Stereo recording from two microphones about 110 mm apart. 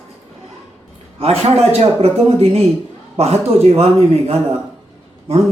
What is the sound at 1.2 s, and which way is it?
A man's voice, 65° right (ahead or behind).